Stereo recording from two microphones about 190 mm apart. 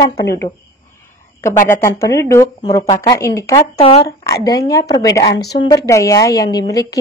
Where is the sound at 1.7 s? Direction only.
15° left (ahead or behind).